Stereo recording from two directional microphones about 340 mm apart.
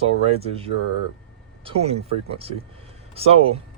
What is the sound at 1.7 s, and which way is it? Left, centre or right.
Speech, centre.